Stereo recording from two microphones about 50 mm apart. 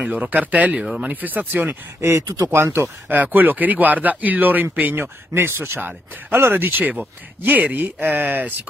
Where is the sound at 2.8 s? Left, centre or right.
Right.